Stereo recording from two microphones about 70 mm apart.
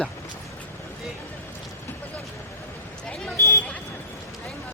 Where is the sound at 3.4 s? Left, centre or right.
Left.